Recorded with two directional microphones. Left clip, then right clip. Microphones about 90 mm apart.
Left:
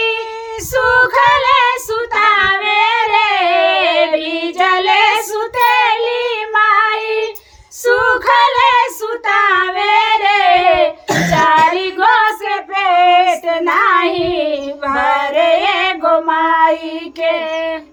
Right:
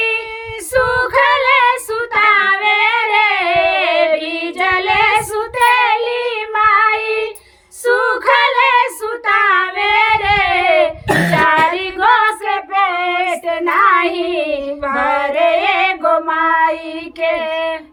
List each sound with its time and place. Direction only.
0.7 s female singing: 15° left (ahead or behind)
4.6 s child singing: 20° left (ahead or behind)
7.9 s female singing: 15° left (ahead or behind)
8.3 s child singing: 20° left (ahead or behind)
9.2 s singing: 20° left (ahead or behind)
11.3 s child singing: 20° left (ahead or behind)
12.7 s child singing: 65° left (ahead or behind)
13.7 s child singing: 20° left (ahead or behind)